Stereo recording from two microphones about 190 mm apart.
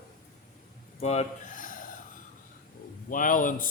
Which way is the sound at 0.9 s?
35° left (ahead or behind).